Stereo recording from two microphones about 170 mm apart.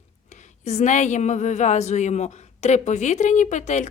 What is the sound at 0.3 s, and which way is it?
A woman's voice, 45° left (ahead or behind).